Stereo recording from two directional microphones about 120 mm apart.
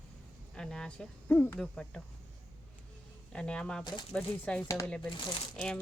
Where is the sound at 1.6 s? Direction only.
5° left (ahead or behind).